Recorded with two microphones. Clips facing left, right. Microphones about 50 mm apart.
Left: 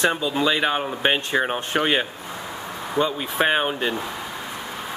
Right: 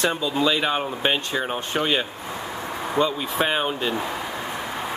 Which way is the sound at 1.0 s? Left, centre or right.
Left.